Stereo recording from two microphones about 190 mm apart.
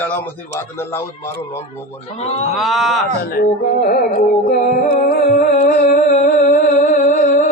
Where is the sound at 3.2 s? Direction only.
50° left (ahead or behind).